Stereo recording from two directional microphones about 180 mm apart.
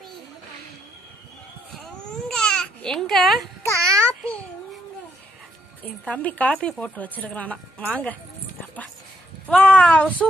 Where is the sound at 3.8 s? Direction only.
15° right (ahead or behind).